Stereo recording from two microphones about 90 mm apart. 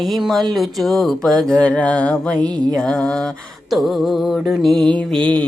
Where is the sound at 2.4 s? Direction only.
50° right (ahead or behind).